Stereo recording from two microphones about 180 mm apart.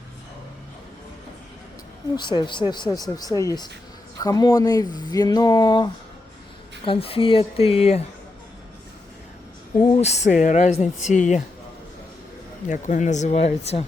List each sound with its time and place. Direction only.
2.1 s speech: 25° left (ahead or behind)
9.8 s speech: 35° left (ahead or behind)
12.6 s speech: 45° left (ahead or behind)